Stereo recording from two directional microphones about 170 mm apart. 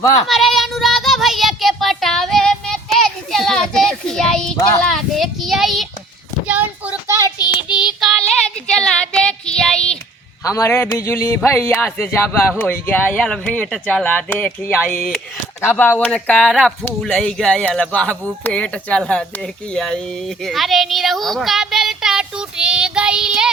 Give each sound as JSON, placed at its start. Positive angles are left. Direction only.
{"t": 0.3, "sound": "child singing", "side_deg": 0}
{"t": 7.3, "sound": "child singing", "side_deg": 25}
{"t": 7.8, "sound": "child singing", "side_deg": 0}
{"t": 10.4, "sound": "speech", "side_deg": 15}